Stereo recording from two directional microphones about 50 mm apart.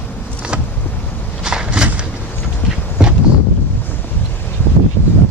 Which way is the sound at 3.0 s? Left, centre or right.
Centre.